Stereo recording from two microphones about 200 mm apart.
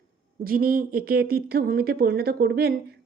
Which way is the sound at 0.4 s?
45° right (ahead or behind).